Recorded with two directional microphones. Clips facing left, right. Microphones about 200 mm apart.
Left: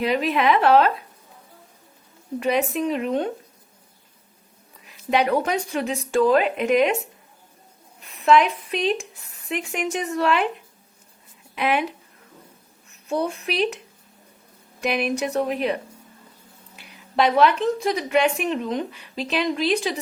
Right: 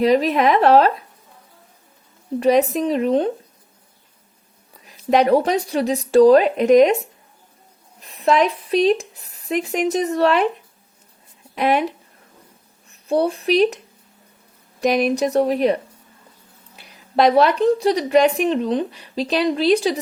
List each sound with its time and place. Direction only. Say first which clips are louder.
0.0 s a woman's voice: right 5 dB; 40° right (ahead or behind)
2.4 s a woman's voice: right 6 dB; 35° right (ahead or behind)
4.9 s a woman's voice: right 6 dB; 35° right (ahead or behind)
8.0 s a woman's voice: even; 35° right (ahead or behind)
11.5 s a woman's voice: right 4 dB; 40° right (ahead or behind)
14.8 s a woman's voice: right 6 dB; 40° right (ahead or behind)